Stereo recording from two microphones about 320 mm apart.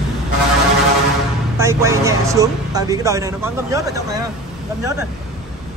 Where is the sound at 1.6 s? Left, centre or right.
Centre.